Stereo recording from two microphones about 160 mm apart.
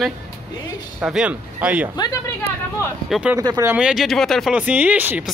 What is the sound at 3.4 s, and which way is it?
Speech, 20° right (ahead or behind).